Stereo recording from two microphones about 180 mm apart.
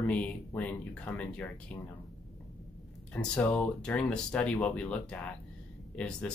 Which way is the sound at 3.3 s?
10° left (ahead or behind).